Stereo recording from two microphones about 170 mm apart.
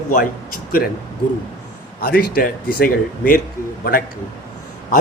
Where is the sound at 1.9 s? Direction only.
60° left (ahead or behind).